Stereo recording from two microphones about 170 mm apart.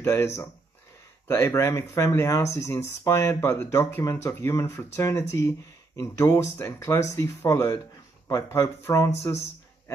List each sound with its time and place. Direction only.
0.0 s speech: 15° left (ahead or behind)